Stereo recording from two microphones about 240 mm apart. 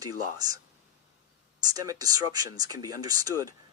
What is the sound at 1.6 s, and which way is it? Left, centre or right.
Speech, centre.